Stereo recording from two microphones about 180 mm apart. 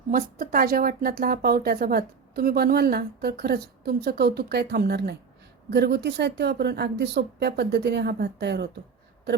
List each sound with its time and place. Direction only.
0.1 s speech: 55° right (ahead or behind); by 8.7 s 70° right (ahead or behind)